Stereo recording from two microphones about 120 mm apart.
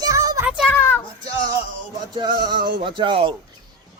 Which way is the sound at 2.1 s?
40° right (ahead or behind).